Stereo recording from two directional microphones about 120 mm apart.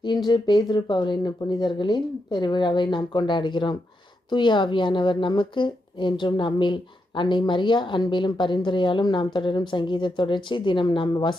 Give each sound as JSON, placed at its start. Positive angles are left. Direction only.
{"t": 0.3, "sound": "speech", "side_deg": 40}